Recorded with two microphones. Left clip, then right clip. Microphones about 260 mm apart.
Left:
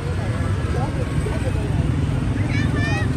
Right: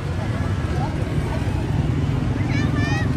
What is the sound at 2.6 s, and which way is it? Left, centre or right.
Vehicle, right.